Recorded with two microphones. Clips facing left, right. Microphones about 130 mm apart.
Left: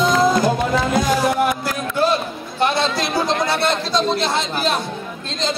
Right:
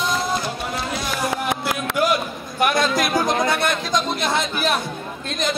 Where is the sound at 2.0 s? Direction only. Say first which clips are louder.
Left 3 dB; 30° left (ahead or behind).